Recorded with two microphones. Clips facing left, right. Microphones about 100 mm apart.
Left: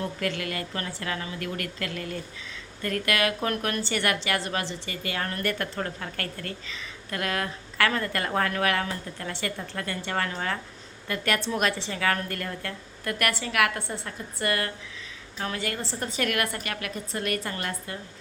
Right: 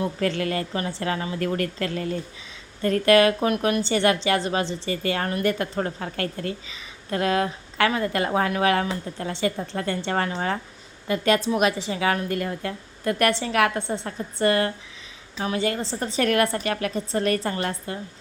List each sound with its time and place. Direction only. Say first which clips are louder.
0.2 s a woman's voice: right 6 dB; 35° right (ahead or behind)
3.4 s a woman's voice: right 6 dB; 15° right (ahead or behind)
5.3 s a woman's voice: right 6 dB; 20° right (ahead or behind)